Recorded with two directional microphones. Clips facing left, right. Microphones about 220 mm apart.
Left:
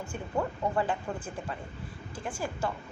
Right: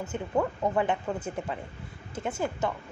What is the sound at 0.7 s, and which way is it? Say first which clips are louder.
A woman's voice: right 3 dB; 20° right (ahead or behind).